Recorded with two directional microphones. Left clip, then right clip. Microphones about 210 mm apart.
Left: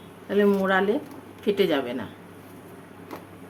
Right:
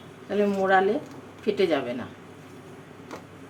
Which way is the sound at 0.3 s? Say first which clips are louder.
Left 1 dB; 25° left (ahead or behind).